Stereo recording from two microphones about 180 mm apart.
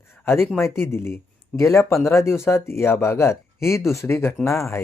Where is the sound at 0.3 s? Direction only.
10° left (ahead or behind).